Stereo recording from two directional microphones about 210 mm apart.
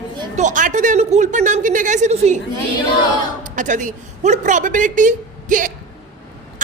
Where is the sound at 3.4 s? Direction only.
35° right (ahead or behind).